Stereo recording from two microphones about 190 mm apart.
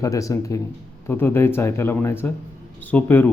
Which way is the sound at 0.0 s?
15° left (ahead or behind).